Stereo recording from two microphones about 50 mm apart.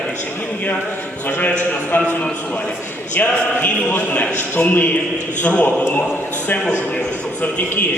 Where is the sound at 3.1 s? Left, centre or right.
Left.